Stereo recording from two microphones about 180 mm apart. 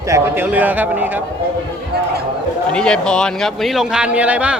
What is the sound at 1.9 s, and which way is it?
Speech, 60° right (ahead or behind).